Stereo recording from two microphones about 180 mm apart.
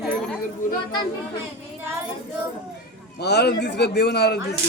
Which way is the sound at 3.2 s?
65° left (ahead or behind).